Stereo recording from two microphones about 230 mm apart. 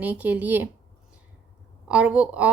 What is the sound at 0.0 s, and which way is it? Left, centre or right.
Speech, centre.